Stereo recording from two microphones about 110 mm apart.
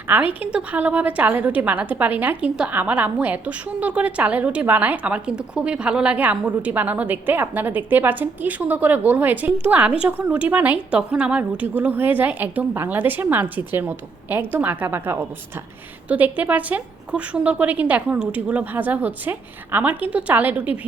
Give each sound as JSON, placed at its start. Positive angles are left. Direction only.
{"t": 0.1, "sound": "a woman's voice", "side_deg": -15}